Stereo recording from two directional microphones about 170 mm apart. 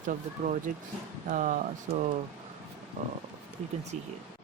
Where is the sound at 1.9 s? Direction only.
35° right (ahead or behind).